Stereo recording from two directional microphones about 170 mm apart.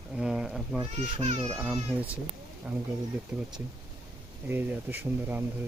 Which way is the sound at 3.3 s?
5° right (ahead or behind).